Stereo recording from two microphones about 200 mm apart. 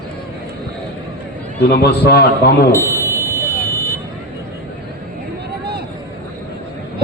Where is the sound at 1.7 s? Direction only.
50° left (ahead or behind).